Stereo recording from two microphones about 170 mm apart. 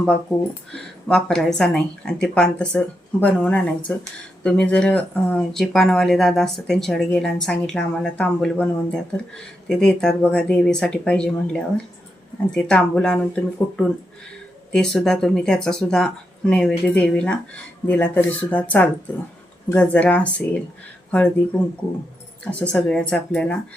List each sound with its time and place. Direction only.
0.7 s speech: 5° left (ahead or behind)